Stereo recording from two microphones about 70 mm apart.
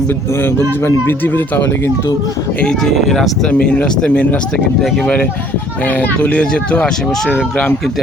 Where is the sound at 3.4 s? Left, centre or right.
Centre.